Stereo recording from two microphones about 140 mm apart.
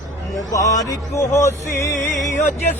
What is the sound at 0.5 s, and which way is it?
Music, 25° left (ahead or behind).